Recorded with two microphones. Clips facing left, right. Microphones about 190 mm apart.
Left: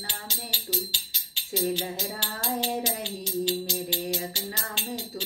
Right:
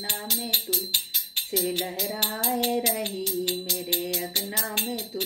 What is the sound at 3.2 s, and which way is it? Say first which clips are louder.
Music: even; 20° left (ahead or behind).